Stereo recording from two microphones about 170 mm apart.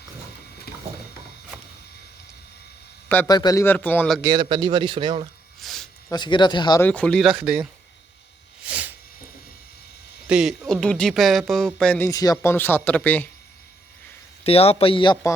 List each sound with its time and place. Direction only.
0.7 s a sound: 65° left (ahead or behind)
3.2 s a man's voice: 25° left (ahead or behind)
4.2 s a man's voice: 25° right (ahead or behind)
5.5 s a sound: centre (ahead or behind)
6.1 s speech: 25° left (ahead or behind)
6.8 s speech: 5° left (ahead or behind)
8.6 s a sound: 10° right (ahead or behind)
10.2 s speech: 5° right (ahead or behind)
14.4 s a man's voice: 35° left (ahead or behind)